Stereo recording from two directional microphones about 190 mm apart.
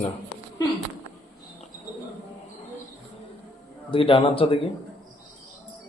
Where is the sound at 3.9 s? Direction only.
30° left (ahead or behind).